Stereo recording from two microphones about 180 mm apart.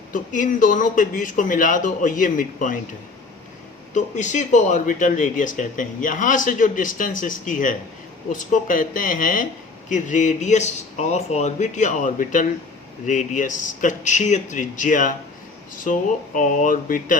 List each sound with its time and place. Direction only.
0.1 s speech: 45° left (ahead or behind)
3.9 s speech: 40° left (ahead or behind)